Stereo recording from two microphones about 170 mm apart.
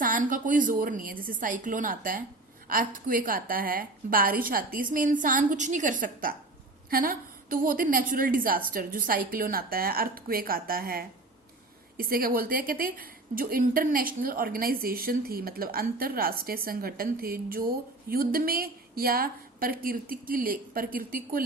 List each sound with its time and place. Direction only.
0.0 s a woman's voice: 50° right (ahead or behind)